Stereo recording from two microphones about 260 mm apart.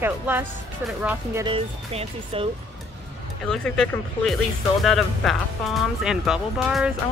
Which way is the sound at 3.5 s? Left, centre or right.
Centre.